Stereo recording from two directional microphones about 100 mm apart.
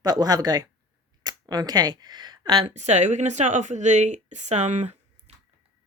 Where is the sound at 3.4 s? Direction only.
90° right.